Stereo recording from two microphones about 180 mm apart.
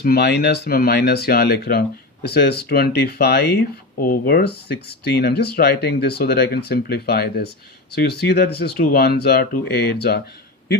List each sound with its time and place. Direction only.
0.0 s speech: 60° left (ahead or behind)